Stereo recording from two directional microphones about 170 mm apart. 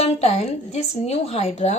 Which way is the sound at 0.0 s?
40° left (ahead or behind).